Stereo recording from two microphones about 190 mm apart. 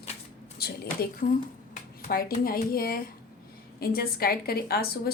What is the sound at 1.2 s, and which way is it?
A woman's voice, 45° left (ahead or behind).